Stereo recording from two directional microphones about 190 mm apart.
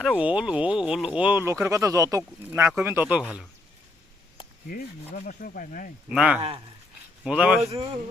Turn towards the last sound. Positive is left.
turn(degrees=-35)  # may be behind; listen again after turning